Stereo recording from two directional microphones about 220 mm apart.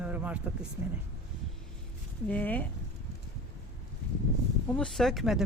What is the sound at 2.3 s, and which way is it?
Speech, 10° left (ahead or behind).